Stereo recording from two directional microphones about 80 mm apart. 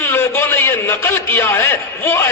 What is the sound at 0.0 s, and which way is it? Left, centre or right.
A man's voice, left.